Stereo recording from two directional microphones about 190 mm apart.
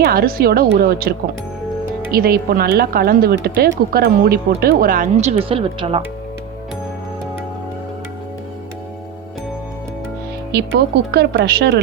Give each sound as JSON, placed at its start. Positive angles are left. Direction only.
{"t": 0.0, "sound": "a woman's voice", "side_deg": -50}
{"t": 2.1, "sound": "a woman's voice", "side_deg": -50}
{"t": 5.5, "sound": "speech", "side_deg": -30}
{"t": 10.5, "sound": "speech", "side_deg": -60}